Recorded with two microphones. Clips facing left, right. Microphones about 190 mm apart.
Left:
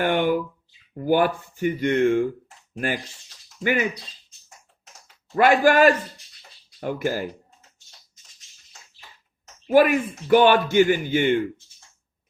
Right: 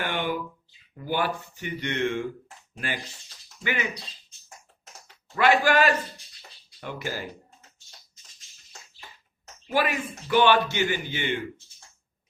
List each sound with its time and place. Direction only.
0.0 s a sound: 50° left (ahead or behind)
0.9 s speech: 50° left (ahead or behind)
5.3 s speech: 45° left (ahead or behind)
9.6 s speech: 50° left (ahead or behind)